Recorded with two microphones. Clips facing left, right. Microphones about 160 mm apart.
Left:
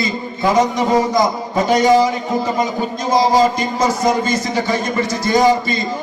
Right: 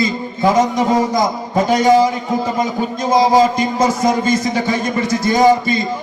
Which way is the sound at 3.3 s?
50° right (ahead or behind).